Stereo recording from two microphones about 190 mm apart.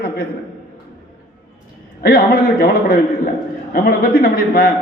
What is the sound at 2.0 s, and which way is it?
A man's voice, 55° left (ahead or behind).